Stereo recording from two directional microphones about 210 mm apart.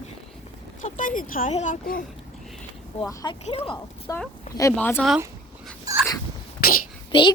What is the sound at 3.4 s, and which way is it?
Speech, 30° left (ahead or behind).